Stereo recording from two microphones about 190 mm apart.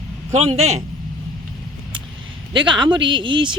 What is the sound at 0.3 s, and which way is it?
Speech, 35° right (ahead or behind).